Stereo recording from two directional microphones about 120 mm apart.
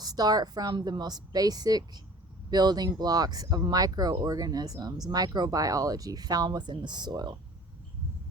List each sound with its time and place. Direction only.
0.0 s speech: 35° right (ahead or behind)